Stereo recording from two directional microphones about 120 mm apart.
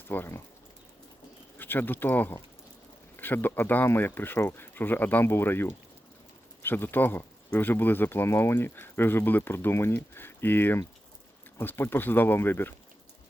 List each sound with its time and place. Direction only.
0.1 s speech: 20° left (ahead or behind)
1.5 s speech: 15° left (ahead or behind)